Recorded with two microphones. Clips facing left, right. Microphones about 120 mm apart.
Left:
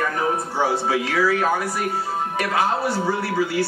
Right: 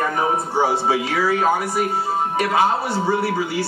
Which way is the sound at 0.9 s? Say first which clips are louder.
Right 1 dB; 25° right (ahead or behind).